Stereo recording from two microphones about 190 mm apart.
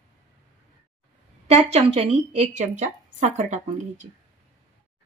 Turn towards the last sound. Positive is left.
turn(degrees=-40)  # may be behind; listen again after turning